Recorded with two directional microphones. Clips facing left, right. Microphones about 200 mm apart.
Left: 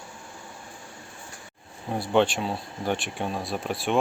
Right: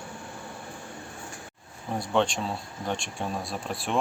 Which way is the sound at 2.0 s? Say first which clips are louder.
Left 3 dB; 5° left (ahead or behind).